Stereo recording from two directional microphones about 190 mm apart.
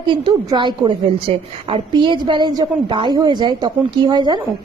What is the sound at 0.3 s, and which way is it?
A woman's voice, 25° right (ahead or behind).